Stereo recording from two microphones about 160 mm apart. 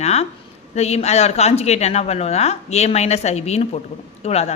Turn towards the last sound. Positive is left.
turn(degrees=40)  # may be behind; listen again after turning